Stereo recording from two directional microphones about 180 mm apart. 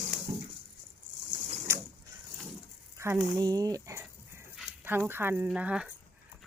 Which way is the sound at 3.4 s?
20° right (ahead or behind).